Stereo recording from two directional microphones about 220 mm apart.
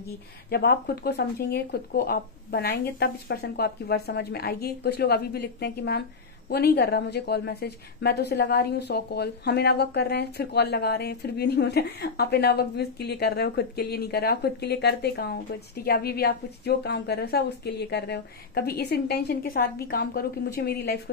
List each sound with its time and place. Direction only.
0.5 s a woman's voice: 45° left (ahead or behind)